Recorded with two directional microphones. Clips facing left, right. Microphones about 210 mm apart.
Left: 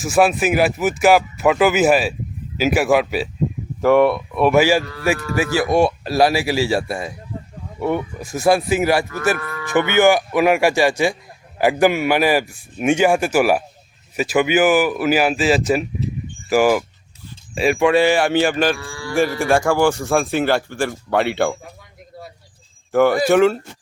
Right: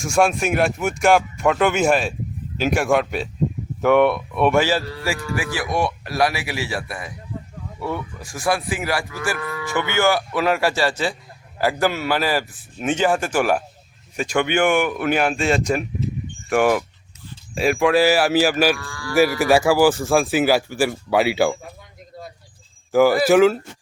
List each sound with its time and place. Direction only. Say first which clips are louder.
0.0 s speech: left 3 dB; 5° left (ahead or behind)
5.4 s a man's voice: left 8 dB; 25° left (ahead or behind)
9.4 s cattle: right 1 dB; 5° right (ahead or behind)
9.6 s speech: left 6 dB; 15° left (ahead or behind); by 18.8 s 5° right (ahead or behind)
18.8 s cattle: left 3 dB; 25° left (ahead or behind)
19.1 s speech: right 1 dB; 5° right (ahead or behind)
22.9 s speech: even; centre (ahead or behind)